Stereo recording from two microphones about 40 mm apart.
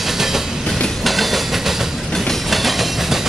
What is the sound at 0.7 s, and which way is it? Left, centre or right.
Train, centre.